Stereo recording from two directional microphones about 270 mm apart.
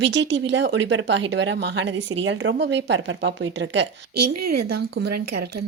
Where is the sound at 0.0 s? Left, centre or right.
Right.